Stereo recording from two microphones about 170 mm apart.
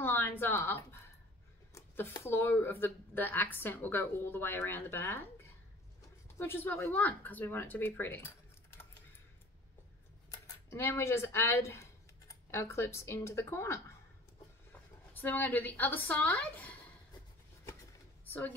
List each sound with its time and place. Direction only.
0.0 s speech: 10° left (ahead or behind)
10.3 s speech: 20° left (ahead or behind)
18.2 s a sound: 10° left (ahead or behind)